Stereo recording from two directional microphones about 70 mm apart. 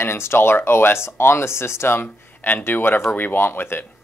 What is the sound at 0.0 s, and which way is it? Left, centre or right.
Speech, left.